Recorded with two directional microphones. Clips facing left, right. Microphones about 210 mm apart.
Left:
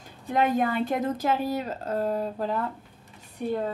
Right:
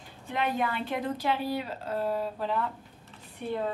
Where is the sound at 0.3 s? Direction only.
45° left (ahead or behind).